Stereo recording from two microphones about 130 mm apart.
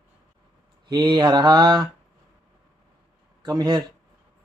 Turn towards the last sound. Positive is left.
turn(degrees=-35)  # may be behind; listen again after turning